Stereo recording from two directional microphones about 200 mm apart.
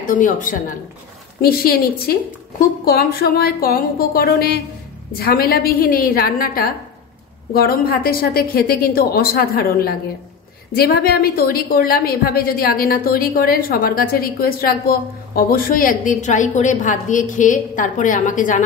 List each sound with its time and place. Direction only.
0.0 s a woman's voice: 40° left (ahead or behind)